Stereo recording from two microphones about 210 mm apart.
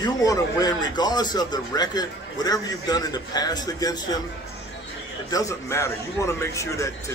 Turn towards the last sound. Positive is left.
turn(degrees=15)  # may be behind; listen again after turning